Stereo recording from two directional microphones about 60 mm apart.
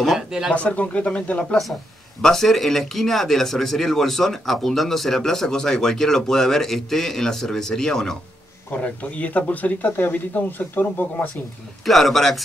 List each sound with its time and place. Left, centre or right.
0.0 s a sound: centre
0.5 s speech: left
2.2 s speech: centre
8.8 s speech: left
11.8 s speech: centre